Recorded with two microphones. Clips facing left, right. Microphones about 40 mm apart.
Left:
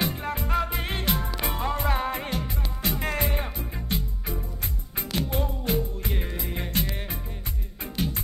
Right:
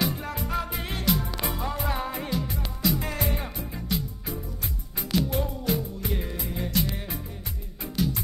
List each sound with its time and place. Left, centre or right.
0.0 s music: left
6.1 s music: centre
6.4 s music: left